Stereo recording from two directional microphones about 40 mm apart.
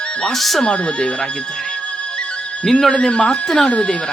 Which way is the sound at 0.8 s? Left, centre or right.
Left.